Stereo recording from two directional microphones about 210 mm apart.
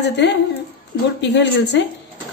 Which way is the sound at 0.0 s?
55° left (ahead or behind).